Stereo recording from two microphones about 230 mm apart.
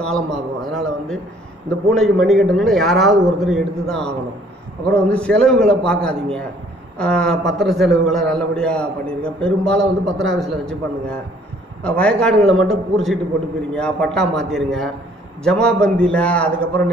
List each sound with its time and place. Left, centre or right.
0.0 s a man's voice: centre
11.8 s a man's voice: centre